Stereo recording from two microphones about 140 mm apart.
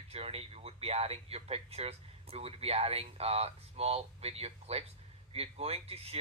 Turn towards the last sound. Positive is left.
turn(degrees=-45)  # may be behind; listen again after turning